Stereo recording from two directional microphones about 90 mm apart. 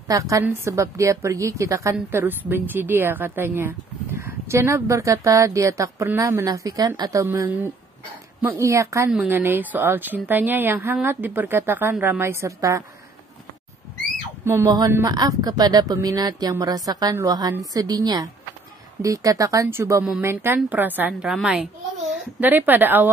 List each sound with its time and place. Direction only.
0.1 s a woman's voice: 40° right (ahead or behind)
2.0 s a woman's voice: 25° right (ahead or behind); by 6.9 s 40° right (ahead or behind)
7.2 s a woman's voice: 20° right (ahead or behind)
9.3 s speech: 25° right (ahead or behind)
14.4 s a sound: 30° right (ahead or behind)
15.0 s a woman's voice: 45° right (ahead or behind); by 21.1 s 20° right (ahead or behind)
21.1 s a woman's voice: 5° right (ahead or behind)
22.4 s speech: 20° right (ahead or behind)